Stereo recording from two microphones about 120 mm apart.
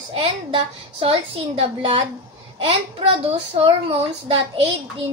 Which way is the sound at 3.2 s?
50° right (ahead or behind).